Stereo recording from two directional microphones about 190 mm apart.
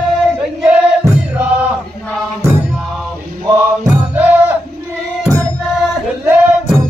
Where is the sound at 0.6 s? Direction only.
5° right (ahead or behind).